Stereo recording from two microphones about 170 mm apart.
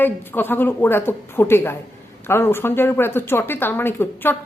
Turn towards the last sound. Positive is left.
turn(degrees=15)  # may be behind; listen again after turning